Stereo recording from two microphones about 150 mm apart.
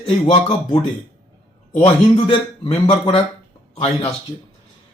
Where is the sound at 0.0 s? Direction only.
40° left (ahead or behind).